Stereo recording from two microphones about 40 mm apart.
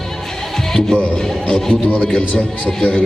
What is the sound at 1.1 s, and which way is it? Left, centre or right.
Music, centre.